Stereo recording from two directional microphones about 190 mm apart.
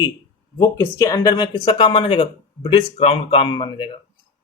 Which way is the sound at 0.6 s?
15° left (ahead or behind).